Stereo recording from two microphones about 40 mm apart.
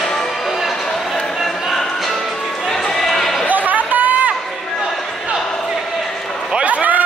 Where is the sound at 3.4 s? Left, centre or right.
Right.